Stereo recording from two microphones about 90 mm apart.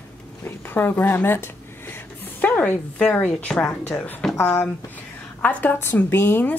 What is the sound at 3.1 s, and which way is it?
A woman's voice, 15° left (ahead or behind).